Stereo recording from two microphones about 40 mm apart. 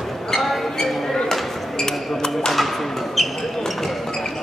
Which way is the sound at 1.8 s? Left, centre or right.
Centre.